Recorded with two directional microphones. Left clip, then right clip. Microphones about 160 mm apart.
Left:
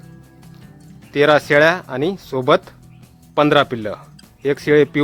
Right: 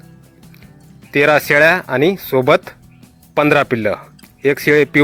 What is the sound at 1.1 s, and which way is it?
A man's voice, 25° right (ahead or behind).